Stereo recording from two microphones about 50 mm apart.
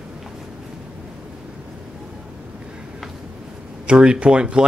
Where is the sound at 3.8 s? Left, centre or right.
Centre.